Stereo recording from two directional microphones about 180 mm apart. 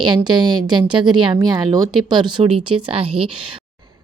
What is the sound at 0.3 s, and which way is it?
A woman's voice, 25° right (ahead or behind).